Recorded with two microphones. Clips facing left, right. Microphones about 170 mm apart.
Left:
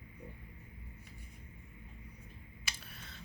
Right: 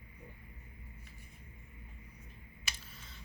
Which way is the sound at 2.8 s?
65° left (ahead or behind).